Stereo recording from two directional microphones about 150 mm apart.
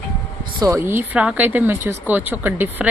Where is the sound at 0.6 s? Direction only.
20° right (ahead or behind).